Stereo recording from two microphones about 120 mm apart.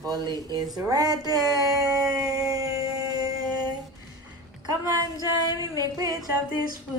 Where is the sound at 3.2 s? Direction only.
30° right (ahead or behind).